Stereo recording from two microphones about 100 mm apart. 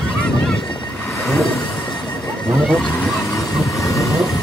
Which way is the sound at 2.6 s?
5° left (ahead or behind).